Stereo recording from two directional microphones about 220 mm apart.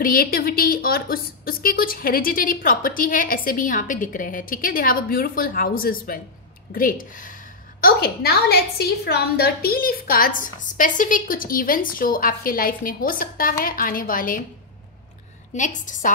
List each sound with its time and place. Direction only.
0.0 s a woman's voice: 40° left (ahead or behind)
15.5 s a woman's voice: 35° left (ahead or behind)